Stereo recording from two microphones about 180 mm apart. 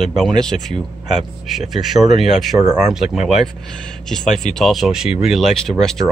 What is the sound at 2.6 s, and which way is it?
Speech, 15° right (ahead or behind).